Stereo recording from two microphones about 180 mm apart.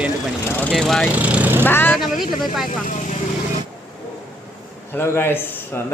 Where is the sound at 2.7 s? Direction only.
45° left (ahead or behind).